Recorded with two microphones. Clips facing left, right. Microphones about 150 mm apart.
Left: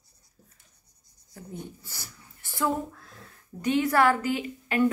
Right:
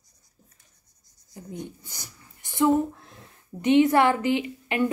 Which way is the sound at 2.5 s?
25° right (ahead or behind).